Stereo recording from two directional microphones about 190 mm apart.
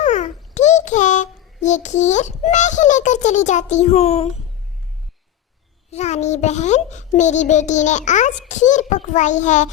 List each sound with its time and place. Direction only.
0.0 s a child's voice: 40° left (ahead or behind)
5.9 s a child's voice: 35° left (ahead or behind)